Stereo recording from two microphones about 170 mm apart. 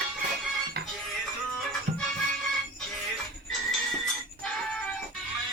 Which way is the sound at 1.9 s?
50° right (ahead or behind).